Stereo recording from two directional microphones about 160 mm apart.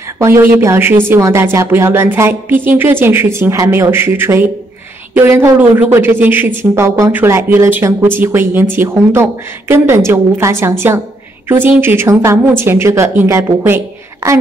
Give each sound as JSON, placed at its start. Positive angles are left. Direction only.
{"t": 0.2, "sound": "speech", "side_deg": -15}